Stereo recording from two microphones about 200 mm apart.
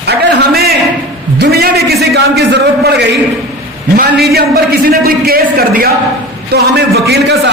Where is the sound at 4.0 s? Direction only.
50° right (ahead or behind).